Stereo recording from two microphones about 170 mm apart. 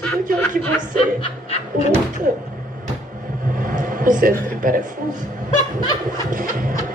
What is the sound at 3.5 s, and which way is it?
Music, 55° right (ahead or behind).